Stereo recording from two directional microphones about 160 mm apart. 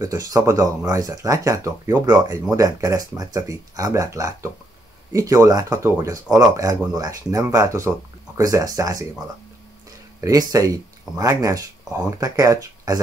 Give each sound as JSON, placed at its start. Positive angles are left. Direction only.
{"t": 0.0, "sound": "speech", "side_deg": -20}
{"t": 10.2, "sound": "speech", "side_deg": -25}